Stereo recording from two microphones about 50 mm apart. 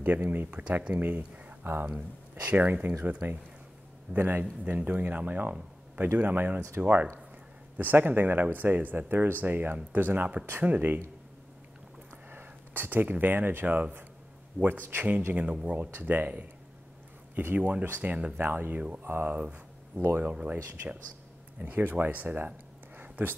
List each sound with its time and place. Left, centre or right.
0.0 s speech: right
1.6 s speech: right
2.0 s speech: right
4.1 s speech: right
12.3 s speech: right
15.3 s speech: right
17.6 s speech: right
18.3 s speech: right
19.2 s speech: right
19.9 s speech: right
20.2 s speech: right
21.5 s speech: right
22.9 s a sound: right